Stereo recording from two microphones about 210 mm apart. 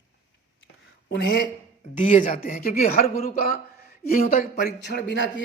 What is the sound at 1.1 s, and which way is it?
Speech, 55° left (ahead or behind).